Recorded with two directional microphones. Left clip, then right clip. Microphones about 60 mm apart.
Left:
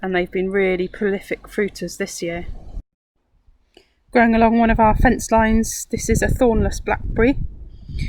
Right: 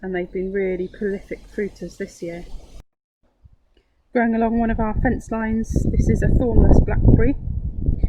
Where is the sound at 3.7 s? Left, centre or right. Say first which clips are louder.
Left 5 dB; left.